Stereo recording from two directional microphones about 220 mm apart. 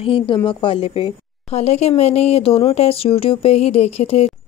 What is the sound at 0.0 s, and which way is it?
A woman's voice, 25° left (ahead or behind).